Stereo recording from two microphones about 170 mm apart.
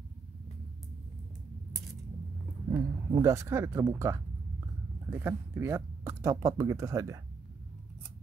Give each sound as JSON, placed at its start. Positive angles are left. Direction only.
{"t": 2.7, "sound": "speech", "side_deg": -20}